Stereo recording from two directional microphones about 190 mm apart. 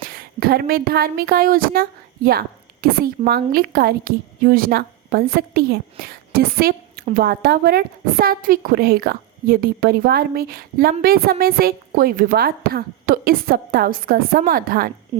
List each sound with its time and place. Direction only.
0.0 s a woman's voice: 50° right (ahead or behind)